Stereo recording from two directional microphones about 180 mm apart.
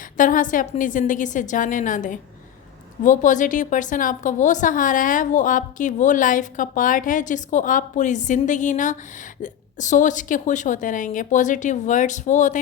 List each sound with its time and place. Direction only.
0.0 s a woman's voice: 50° left (ahead or behind)